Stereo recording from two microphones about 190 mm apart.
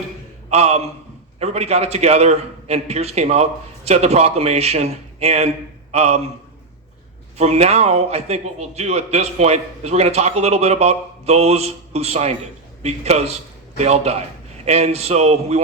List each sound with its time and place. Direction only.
0.5 s a man's voice: 35° right (ahead or behind)
7.3 s a man's voice: 35° right (ahead or behind)